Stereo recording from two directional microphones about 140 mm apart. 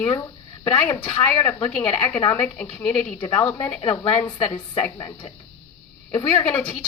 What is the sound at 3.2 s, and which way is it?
Speech, 20° left (ahead or behind).